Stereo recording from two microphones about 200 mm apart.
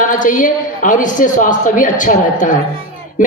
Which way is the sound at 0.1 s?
40° left (ahead or behind).